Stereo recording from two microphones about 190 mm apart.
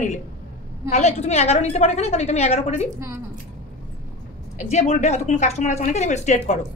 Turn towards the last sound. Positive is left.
turn(degrees=35)  # may be behind; listen again after turning